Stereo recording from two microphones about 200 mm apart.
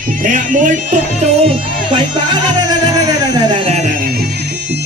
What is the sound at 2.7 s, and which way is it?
Music, 20° right (ahead or behind).